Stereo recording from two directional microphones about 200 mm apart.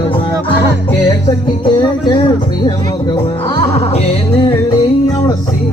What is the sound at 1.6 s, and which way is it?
Music, 20° left (ahead or behind).